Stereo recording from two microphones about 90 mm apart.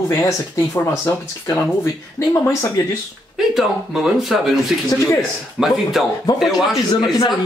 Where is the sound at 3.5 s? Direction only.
5° right (ahead or behind).